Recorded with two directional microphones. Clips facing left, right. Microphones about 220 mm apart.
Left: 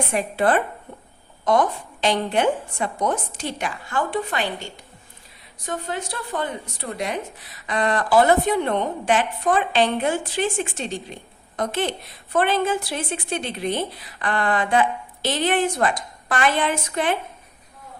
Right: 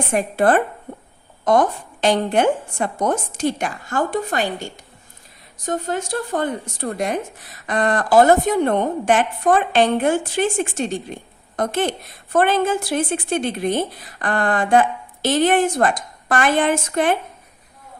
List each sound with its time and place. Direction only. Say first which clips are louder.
0.1 s speech: right 5 dB; 45° right (ahead or behind)